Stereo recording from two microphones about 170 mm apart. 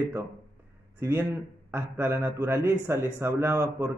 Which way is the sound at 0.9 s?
15° right (ahead or behind).